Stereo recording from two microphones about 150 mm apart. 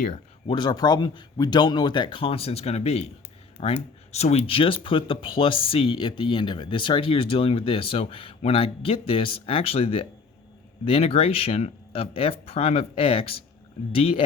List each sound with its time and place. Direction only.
0.4 s speech: 30° left (ahead or behind)